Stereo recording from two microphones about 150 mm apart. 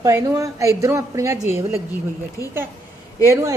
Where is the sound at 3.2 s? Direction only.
20° right (ahead or behind).